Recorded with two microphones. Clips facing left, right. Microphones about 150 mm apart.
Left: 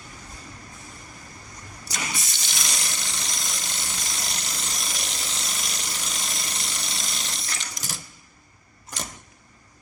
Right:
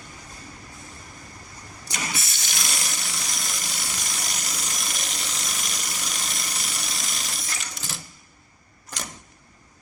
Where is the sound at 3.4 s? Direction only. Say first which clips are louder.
Right 1 dB; 5° right (ahead or behind).